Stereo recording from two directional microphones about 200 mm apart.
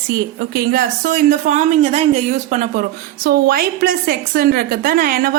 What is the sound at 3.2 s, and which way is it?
A woman's voice, 50° right (ahead or behind).